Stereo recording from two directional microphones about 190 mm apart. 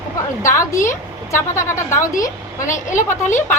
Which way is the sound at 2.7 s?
40° left (ahead or behind).